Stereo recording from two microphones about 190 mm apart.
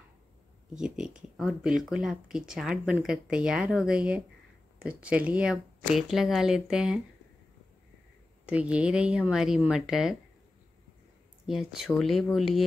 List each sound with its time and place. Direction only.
0.7 s speech: 5° right (ahead or behind)
8.5 s speech: 5° right (ahead or behind)
11.4 s speech: centre (ahead or behind)